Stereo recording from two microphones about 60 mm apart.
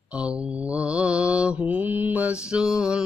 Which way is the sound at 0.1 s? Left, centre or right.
Centre.